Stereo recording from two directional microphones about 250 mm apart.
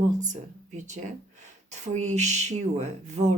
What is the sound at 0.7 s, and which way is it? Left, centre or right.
Speech, right.